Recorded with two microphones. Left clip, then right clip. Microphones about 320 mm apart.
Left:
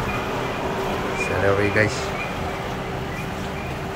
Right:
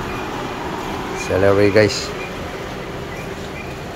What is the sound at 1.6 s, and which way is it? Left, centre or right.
Speech, right.